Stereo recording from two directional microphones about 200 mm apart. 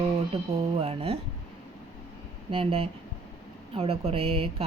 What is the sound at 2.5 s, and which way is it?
Speech, 25° right (ahead or behind).